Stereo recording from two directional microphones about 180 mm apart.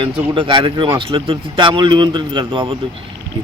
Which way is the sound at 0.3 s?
30° right (ahead or behind).